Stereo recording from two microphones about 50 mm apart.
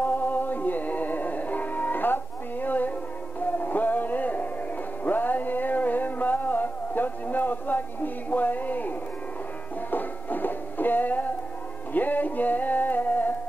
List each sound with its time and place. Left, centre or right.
0.0 s music: left